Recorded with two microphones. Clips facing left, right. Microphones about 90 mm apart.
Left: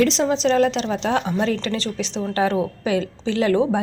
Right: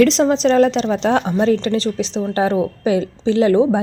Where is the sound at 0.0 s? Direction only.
50° right (ahead or behind).